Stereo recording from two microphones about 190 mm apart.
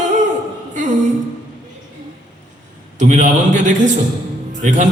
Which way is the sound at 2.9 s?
40° right (ahead or behind).